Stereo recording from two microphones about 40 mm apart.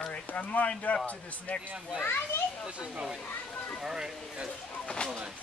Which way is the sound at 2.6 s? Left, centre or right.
Right.